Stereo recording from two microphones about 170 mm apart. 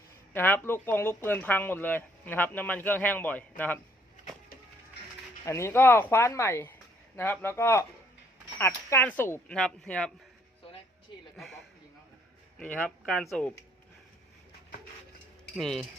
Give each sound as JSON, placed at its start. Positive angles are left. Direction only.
{"t": 0.3, "sound": "speech", "side_deg": 10}
{"t": 5.5, "sound": "speech", "side_deg": 15}
{"t": 11.3, "sound": "a sound", "side_deg": 0}
{"t": 12.7, "sound": "speech", "side_deg": 5}
{"t": 15.5, "sound": "speech", "side_deg": 0}